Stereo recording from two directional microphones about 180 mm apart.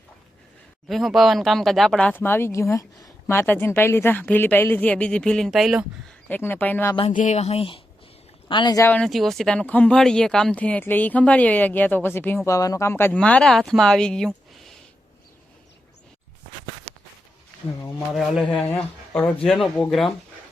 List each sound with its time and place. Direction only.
0.9 s speech: centre (ahead or behind)
6.2 s speech: 10° left (ahead or behind)
7.1 s speech: 45° left (ahead or behind); by 8.8 s 25° left (ahead or behind)
8.8 s speech: 5° left (ahead or behind)
18.1 s speech: centre (ahead or behind)